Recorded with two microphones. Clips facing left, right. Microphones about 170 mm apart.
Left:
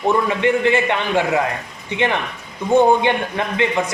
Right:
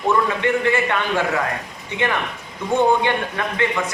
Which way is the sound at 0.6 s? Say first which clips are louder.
Left 2 dB; 20° left (ahead or behind).